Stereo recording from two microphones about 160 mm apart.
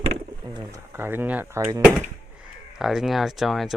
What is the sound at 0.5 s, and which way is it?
Speech, 15° right (ahead or behind).